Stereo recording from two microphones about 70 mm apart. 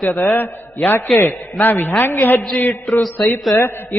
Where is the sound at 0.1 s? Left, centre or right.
Left.